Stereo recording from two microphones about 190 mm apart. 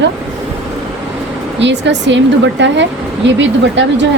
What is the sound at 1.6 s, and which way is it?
Speech, 70° right (ahead or behind).